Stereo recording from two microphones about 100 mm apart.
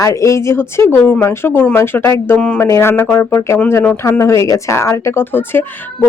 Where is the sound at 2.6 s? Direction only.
25° left (ahead or behind).